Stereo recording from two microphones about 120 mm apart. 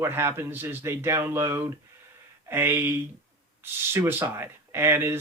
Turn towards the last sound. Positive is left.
turn(degrees=-20)  # may be behind; listen again after turning